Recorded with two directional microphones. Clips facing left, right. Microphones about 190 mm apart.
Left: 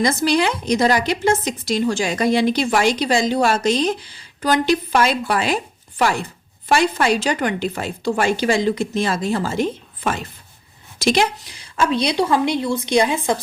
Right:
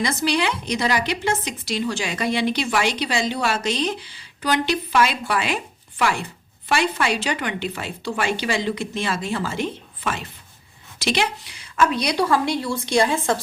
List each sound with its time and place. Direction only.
0.0 s a woman's voice: 45° left (ahead or behind); by 13.4 s 15° left (ahead or behind)